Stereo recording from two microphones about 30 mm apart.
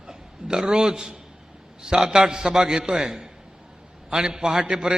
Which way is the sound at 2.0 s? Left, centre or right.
Right.